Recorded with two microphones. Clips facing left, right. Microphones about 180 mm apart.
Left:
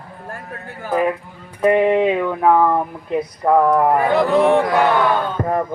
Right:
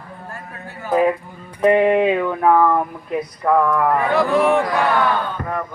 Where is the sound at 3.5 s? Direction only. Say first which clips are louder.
Left 2 dB; 30° left (ahead or behind).